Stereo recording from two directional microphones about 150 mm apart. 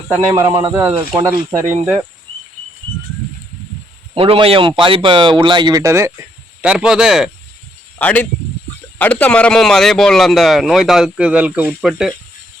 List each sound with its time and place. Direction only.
0.1 s speech: 15° right (ahead or behind)
4.1 s speech: 35° right (ahead or behind); by 6.1 s 20° right (ahead or behind)
6.6 s a man's voice: 5° right (ahead or behind)
7.9 s a man's voice: 10° left (ahead or behind)